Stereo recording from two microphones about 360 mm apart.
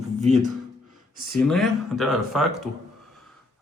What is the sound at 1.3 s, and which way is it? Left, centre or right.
Speech, centre.